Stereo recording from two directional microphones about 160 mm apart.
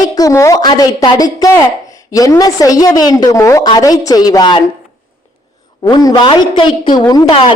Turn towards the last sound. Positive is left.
turn(degrees=25)  # may be behind; listen again after turning